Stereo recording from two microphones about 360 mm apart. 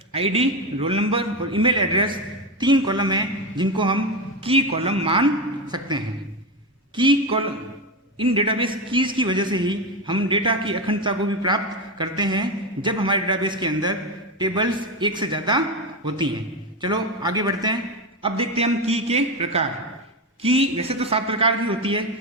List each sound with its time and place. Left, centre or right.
0.1 s a man's voice: centre
16.8 s a man's voice: centre